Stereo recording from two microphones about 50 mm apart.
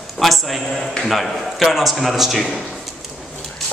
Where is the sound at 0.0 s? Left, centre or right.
Centre.